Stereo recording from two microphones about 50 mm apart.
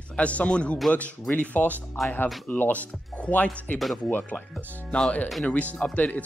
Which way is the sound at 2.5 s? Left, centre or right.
Left.